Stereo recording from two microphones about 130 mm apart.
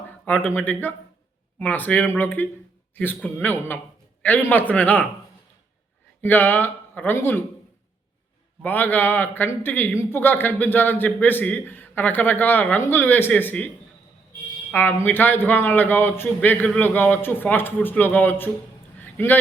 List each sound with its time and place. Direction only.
0.3 s a man's voice: 10° left (ahead or behind)
6.2 s a man's voice: 15° left (ahead or behind)
8.6 s a man's voice: 15° left (ahead or behind)
14.7 s a man's voice: 15° left (ahead or behind)
18.9 s a sound: 15° left (ahead or behind)